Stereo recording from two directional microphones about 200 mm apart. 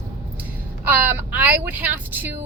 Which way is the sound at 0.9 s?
10° right (ahead or behind).